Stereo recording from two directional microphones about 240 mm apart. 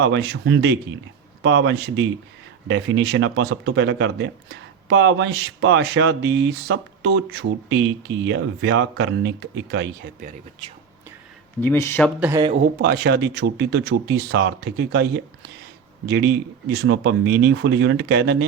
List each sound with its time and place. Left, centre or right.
0.0 s speech: right
11.6 s speech: centre
12.2 s speech: centre
12.8 s speech: right